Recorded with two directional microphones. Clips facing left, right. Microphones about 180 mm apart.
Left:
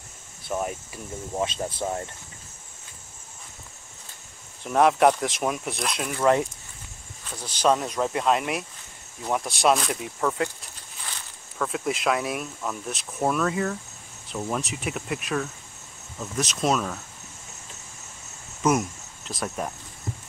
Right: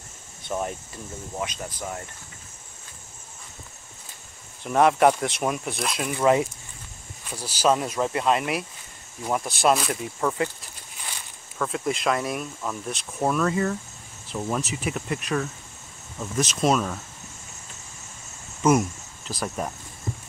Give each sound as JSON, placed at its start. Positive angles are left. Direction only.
{"t": 0.5, "sound": "speech", "side_deg": 5}
{"t": 1.4, "sound": "speech", "side_deg": 25}
{"t": 4.6, "sound": "speech", "side_deg": 0}
{"t": 11.5, "sound": "speech", "side_deg": 0}
{"t": 18.6, "sound": "speech", "side_deg": 0}